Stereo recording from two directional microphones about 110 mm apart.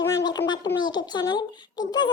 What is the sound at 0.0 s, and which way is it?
A child's voice, 30° left (ahead or behind).